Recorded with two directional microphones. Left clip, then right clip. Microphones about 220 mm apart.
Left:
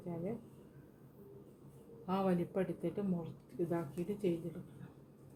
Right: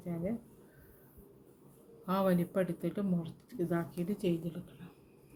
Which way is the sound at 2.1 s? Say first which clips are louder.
Right 4 dB; 40° right (ahead or behind).